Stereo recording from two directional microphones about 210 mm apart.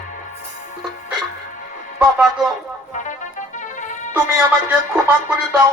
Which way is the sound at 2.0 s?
10° right (ahead or behind).